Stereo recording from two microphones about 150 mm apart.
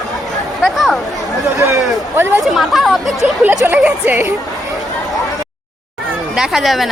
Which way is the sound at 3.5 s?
15° right (ahead or behind).